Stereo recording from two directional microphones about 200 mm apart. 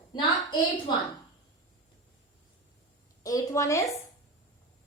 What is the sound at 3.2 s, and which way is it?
Speech, 15° left (ahead or behind).